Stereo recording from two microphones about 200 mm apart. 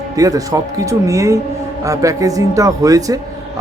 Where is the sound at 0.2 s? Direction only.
15° right (ahead or behind).